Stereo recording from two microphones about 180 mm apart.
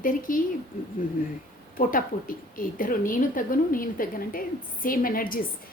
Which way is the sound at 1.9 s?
50° left (ahead or behind).